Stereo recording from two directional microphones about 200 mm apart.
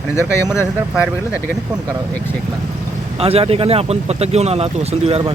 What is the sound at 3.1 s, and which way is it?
Speech, 30° right (ahead or behind).